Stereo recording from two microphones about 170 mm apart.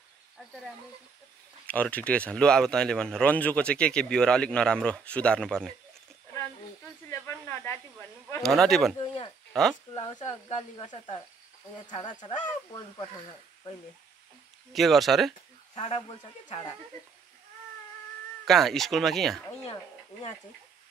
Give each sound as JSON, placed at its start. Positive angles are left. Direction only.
{"t": 1.7, "sound": "speech", "side_deg": 10}
{"t": 7.1, "sound": "snake", "side_deg": 15}
{"t": 8.4, "sound": "speech", "side_deg": 0}
{"t": 8.9, "sound": "speech", "side_deg": 30}
{"t": 9.5, "sound": "speech", "side_deg": 0}
{"t": 9.9, "sound": "speech", "side_deg": 30}
{"t": 14.7, "sound": "speech", "side_deg": 0}
{"t": 16.4, "sound": "speech", "side_deg": 30}
{"t": 18.4, "sound": "speech", "side_deg": 0}
{"t": 19.6, "sound": "speech", "side_deg": 35}